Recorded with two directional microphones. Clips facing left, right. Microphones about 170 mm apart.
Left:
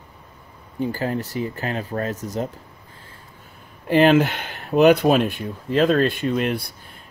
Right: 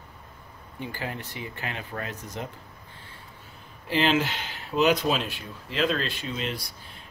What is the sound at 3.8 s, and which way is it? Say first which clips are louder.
Speech: left 9 dB; 55° left (ahead or behind).